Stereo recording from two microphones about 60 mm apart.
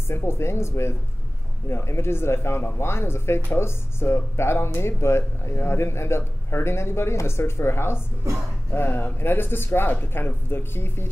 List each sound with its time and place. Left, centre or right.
0.1 s a man's voice: left